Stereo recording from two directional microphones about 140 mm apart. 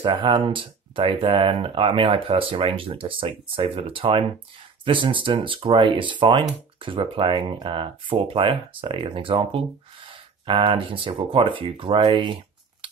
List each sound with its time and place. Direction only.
0.0 s speech: 35° right (ahead or behind)